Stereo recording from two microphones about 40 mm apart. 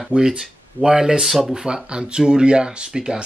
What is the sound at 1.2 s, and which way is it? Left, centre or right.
Speech, centre.